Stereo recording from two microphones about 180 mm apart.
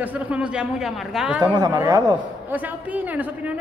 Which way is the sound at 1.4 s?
25° right (ahead or behind).